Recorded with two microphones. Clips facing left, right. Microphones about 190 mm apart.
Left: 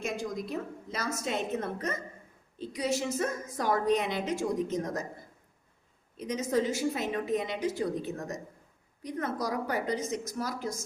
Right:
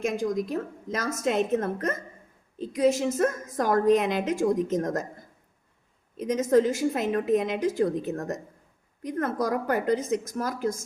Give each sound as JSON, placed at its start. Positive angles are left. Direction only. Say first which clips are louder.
{"t": 0.0, "sound": "a woman's voice", "louder": "right 7 dB", "side_deg": -45}
{"t": 6.1, "sound": "a woman's voice", "louder": "right 8 dB", "side_deg": -45}